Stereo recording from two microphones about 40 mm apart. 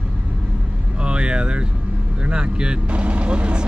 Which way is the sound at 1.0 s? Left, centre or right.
Right.